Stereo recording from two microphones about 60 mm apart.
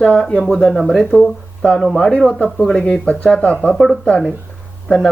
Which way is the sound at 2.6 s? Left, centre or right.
Centre.